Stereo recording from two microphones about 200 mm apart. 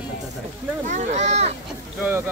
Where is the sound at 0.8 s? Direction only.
35° right (ahead or behind).